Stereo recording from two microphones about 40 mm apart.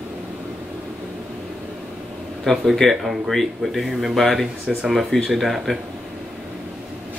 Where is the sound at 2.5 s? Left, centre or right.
Centre.